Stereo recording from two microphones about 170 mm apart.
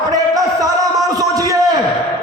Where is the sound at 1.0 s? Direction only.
20° right (ahead or behind).